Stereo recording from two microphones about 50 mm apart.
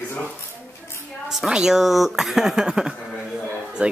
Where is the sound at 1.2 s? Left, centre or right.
Centre.